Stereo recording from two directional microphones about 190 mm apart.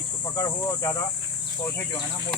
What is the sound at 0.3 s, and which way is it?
Speech, 15° left (ahead or behind).